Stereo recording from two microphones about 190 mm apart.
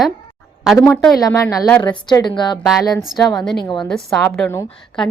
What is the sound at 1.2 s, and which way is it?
A woman's voice, 15° left (ahead or behind).